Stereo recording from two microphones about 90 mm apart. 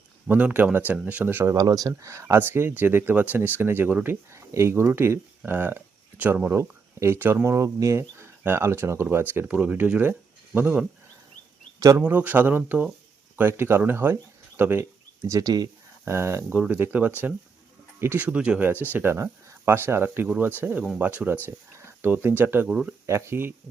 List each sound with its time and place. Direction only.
0.3 s speech: 15° right (ahead or behind)
1.5 s speech: 45° right (ahead or behind)
2.0 s speech: 35° right (ahead or behind); by 6.5 s 15° right (ahead or behind)
6.5 s speech: 30° right (ahead or behind)
7.4 s speech: 35° right (ahead or behind)
11.9 s speech: 20° right (ahead or behind); by 15.7 s 45° right (ahead or behind)
16.0 s speech: 30° right (ahead or behind)
21.4 s speech: 30° right (ahead or behind)